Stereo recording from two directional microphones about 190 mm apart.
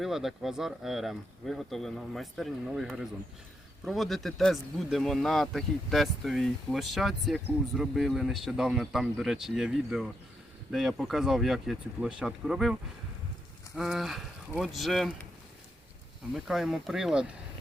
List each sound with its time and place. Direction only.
0.0 s speech: centre (ahead or behind)
13.7 s speech: centre (ahead or behind)
16.3 s speech: centre (ahead or behind)